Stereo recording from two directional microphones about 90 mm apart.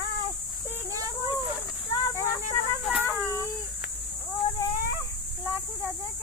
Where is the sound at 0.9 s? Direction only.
40° right (ahead or behind).